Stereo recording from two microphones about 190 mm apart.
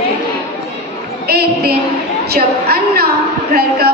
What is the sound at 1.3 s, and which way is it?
A woman's voice, 55° right (ahead or behind).